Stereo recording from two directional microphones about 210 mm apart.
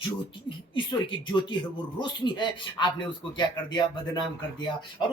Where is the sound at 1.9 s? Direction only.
20° left (ahead or behind).